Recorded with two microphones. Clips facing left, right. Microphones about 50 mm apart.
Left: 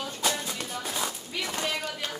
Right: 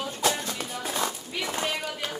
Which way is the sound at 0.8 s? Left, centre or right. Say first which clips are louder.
Right 4 dB; centre.